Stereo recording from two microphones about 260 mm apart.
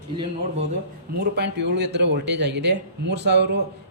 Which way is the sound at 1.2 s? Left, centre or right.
Right.